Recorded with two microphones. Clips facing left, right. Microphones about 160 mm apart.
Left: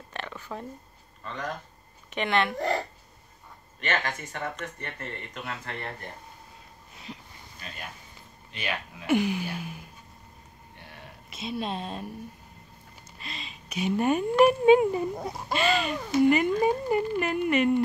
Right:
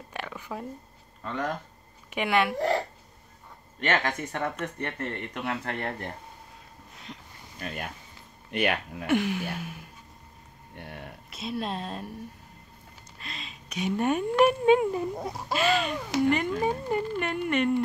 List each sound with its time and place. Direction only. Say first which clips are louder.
0.1 s a sound: right 1 dB; 10° right (ahead or behind)
2.0 s speech: right 1 dB; 10° right (ahead or behind)
3.8 s speech: right 3 dB; 60° right (ahead or behind)
7.1 s speech: left 2 dB; 5° left (ahead or behind)
7.6 s speech: right 6 dB; 50° right (ahead or behind)
9.0 s gasp: left 1 dB; centre (ahead or behind)
10.8 s a sound: right 7 dB; 55° right (ahead or behind)
11.2 s speech: even; centre (ahead or behind)
13.2 s speech: left 1 dB; centre (ahead or behind)